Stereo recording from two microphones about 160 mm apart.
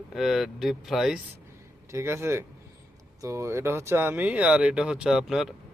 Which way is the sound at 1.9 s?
15° right (ahead or behind).